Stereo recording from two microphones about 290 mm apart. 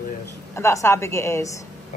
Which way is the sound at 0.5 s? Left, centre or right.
Centre.